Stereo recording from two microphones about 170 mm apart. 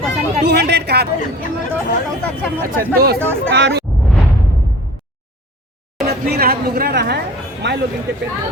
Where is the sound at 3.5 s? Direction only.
90° right.